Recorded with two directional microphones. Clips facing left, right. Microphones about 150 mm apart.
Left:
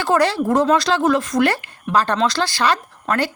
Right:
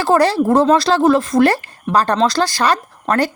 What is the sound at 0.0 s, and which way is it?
Speech, 35° right (ahead or behind).